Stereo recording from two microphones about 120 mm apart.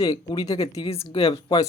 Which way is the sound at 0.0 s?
30° left (ahead or behind).